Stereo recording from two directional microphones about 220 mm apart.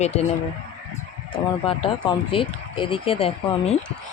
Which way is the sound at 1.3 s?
25° left (ahead or behind).